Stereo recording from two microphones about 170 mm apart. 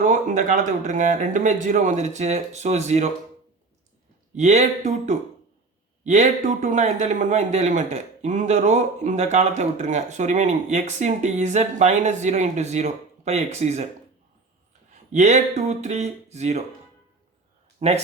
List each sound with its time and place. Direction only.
0.0 s speech: 50° right (ahead or behind)
4.4 s speech: 40° right (ahead or behind)
14.9 s speech: 45° right (ahead or behind)
17.7 s speech: 40° right (ahead or behind)